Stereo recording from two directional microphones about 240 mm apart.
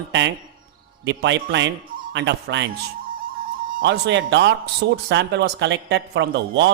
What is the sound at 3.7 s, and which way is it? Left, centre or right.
A man's voice, right.